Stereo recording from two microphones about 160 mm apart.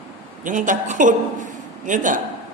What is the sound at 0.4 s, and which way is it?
A man's voice, 55° right (ahead or behind).